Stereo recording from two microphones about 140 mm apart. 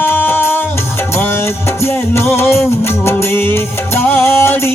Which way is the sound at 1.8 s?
15° left (ahead or behind).